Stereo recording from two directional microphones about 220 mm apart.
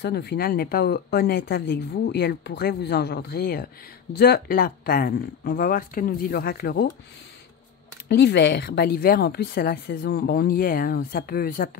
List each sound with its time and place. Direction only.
0.0 s speech: 45° left (ahead or behind)
8.1 s speech: 50° left (ahead or behind)